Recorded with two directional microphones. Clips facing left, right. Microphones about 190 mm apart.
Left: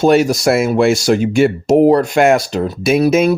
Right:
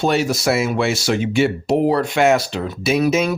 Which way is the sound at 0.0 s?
50° left (ahead or behind).